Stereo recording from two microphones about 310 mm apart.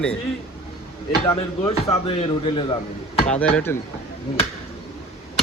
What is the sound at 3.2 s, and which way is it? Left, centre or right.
Speech, centre.